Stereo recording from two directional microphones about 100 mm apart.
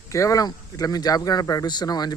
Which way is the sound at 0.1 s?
35° left (ahead or behind).